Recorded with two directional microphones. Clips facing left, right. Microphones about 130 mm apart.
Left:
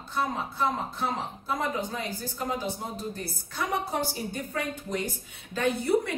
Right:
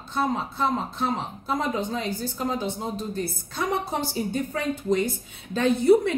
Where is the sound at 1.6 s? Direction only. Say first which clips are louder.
Right 4 dB; 20° right (ahead or behind).